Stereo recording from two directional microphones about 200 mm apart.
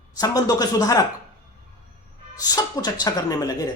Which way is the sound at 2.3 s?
20° left (ahead or behind).